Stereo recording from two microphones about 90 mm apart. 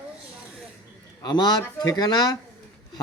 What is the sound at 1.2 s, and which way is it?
A man's voice, 50° left (ahead or behind).